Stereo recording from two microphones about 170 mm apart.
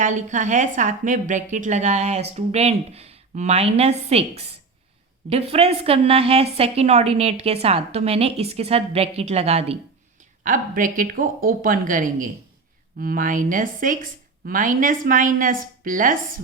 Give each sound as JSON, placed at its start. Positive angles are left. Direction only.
{"t": 0.0, "sound": "a woman's voice", "side_deg": -45}
{"t": 10.4, "sound": "a woman's voice", "side_deg": -50}